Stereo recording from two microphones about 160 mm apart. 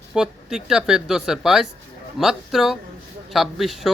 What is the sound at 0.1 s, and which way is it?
A man's voice, 5° right (ahead or behind).